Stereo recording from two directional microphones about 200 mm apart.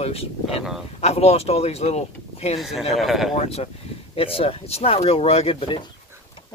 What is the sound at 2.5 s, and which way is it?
Speech, centre (ahead or behind).